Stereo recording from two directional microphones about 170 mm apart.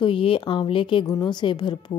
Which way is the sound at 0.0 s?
30° left (ahead or behind).